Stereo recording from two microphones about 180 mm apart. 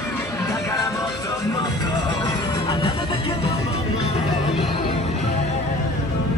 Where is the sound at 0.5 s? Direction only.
20° left (ahead or behind); by 5.1 s 35° left (ahead or behind).